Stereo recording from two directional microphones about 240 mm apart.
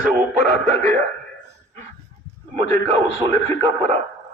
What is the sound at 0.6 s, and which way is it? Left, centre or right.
Speech, right.